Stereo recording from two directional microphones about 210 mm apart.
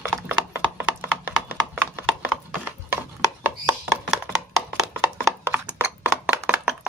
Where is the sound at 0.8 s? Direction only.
10° right (ahead or behind).